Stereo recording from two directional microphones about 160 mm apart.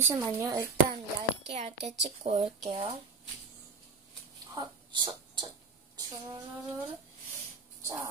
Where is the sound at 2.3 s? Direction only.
30° right (ahead or behind).